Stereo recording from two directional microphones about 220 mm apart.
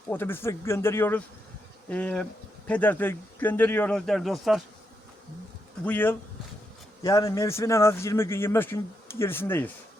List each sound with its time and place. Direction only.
0.1 s a man's voice: 10° left (ahead or behind)
5.8 s a man's voice: 10° left (ahead or behind)